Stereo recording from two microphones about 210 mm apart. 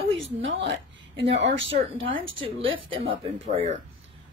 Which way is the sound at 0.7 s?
60° right (ahead or behind).